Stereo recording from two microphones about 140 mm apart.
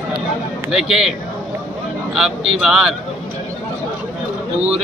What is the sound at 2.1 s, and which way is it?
Speech, 5° right (ahead or behind).